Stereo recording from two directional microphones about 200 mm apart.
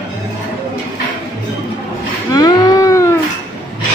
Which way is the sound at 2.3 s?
20° left (ahead or behind).